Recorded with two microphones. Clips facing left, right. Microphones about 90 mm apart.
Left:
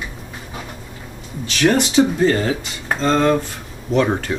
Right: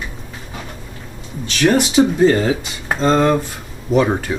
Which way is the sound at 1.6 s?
5° right (ahead or behind).